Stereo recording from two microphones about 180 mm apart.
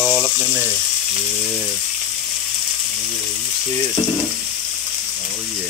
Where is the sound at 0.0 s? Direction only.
5° right (ahead or behind).